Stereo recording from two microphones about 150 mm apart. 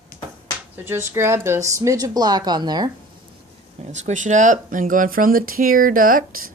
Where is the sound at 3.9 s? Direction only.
55° right (ahead or behind).